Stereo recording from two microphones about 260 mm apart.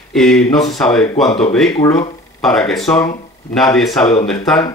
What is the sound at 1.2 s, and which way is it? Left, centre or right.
Speech, left.